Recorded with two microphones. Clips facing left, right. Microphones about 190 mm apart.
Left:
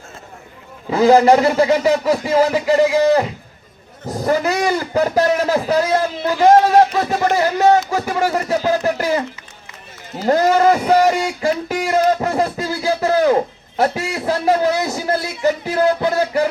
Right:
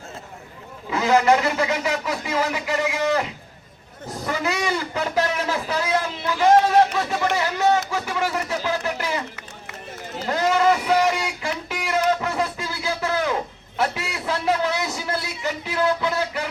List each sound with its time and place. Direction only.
0.9 s a man's voice: 35° left (ahead or behind)
10.2 s speech: 40° left (ahead or behind)